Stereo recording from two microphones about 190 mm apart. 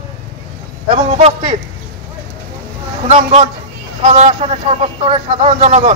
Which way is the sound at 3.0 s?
35° right (ahead or behind).